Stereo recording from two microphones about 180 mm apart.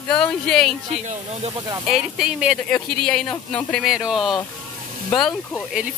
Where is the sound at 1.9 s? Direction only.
5° right (ahead or behind).